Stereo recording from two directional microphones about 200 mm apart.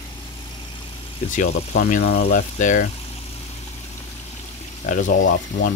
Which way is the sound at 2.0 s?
50° left (ahead or behind).